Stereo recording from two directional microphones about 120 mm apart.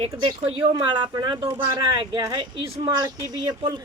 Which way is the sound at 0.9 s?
40° right (ahead or behind).